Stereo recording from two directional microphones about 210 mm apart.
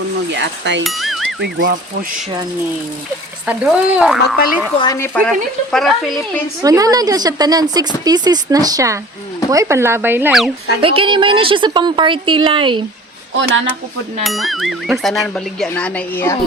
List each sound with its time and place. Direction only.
0.3 s speech: 55° right (ahead or behind)
0.9 s a sound: centre (ahead or behind)
3.4 s a woman's voice: 5° right (ahead or behind)
4.8 s a woman's voice: 15° left (ahead or behind)
6.6 s speech: 15° right (ahead or behind)
10.8 s a woman's voice: 25° right (ahead or behind)
14.3 s a woman's voice: centre (ahead or behind)